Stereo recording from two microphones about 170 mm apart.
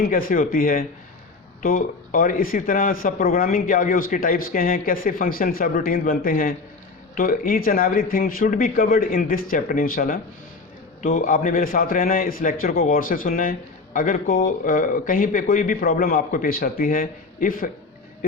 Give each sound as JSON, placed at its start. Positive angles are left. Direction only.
{"t": 0.0, "sound": "a man's voice", "side_deg": 55}